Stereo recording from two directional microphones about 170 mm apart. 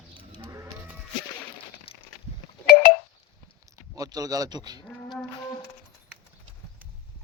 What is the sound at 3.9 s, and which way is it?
Speech, 20° right (ahead or behind).